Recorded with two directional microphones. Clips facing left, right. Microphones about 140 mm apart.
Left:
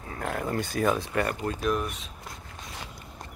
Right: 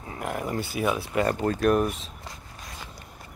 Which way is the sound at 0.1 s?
15° right (ahead or behind).